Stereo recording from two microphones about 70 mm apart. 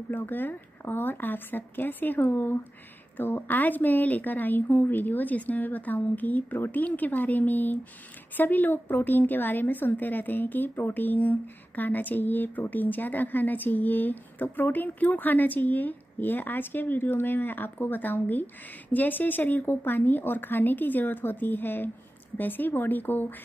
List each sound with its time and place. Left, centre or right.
0.1 s a woman's voice: left